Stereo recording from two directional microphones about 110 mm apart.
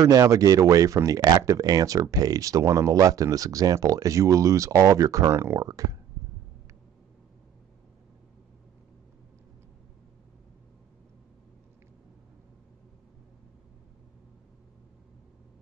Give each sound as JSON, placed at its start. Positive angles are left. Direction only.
{"t": 0.0, "sound": "speech", "side_deg": -30}